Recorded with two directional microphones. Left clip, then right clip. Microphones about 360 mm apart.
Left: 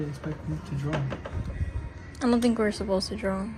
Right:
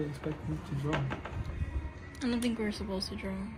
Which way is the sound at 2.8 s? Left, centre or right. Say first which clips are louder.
Left 10 dB; left.